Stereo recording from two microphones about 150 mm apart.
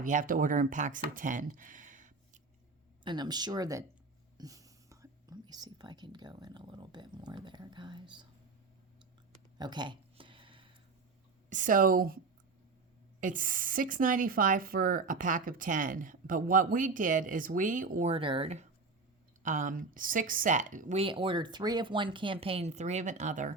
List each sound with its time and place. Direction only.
0.0 s speech: 60° right (ahead or behind)
3.0 s speech: 30° right (ahead or behind)
9.6 s a sound: 30° right (ahead or behind)
11.4 s a woman's voice: 60° right (ahead or behind); by 12.2 s 80° right
13.1 s a woman's voice: 60° right (ahead or behind)
18.1 s a woman's voice: 35° right (ahead or behind); by 21.0 s 55° right (ahead or behind)
21.0 s speech: 35° right (ahead or behind); by 23.6 s 55° right (ahead or behind)